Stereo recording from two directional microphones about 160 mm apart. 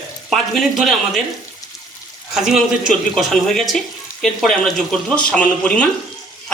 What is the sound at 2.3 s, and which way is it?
Speech, centre (ahead or behind).